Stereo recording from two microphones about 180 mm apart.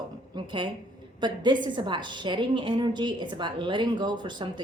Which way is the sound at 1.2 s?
25° right (ahead or behind).